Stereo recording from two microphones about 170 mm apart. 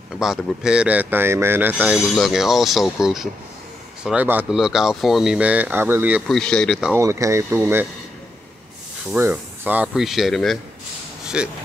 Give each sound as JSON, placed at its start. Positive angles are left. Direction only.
{"t": 0.2, "sound": "speech", "side_deg": 0}
{"t": 6.3, "sound": "speech", "side_deg": 5}
{"t": 6.9, "sound": "speech", "side_deg": -15}
{"t": 9.1, "sound": "speech", "side_deg": -10}